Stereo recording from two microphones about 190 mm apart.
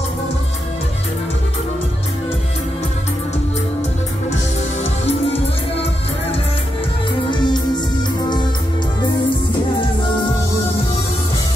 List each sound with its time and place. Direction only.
7.2 s music: 25° left (ahead or behind)